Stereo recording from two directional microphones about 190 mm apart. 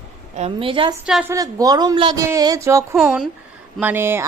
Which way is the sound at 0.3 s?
30° right (ahead or behind).